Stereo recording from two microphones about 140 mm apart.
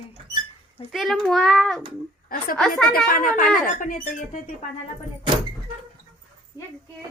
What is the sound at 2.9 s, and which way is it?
Speech, 75° left (ahead or behind).